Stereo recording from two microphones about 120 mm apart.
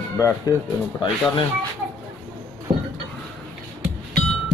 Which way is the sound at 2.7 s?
50° right (ahead or behind).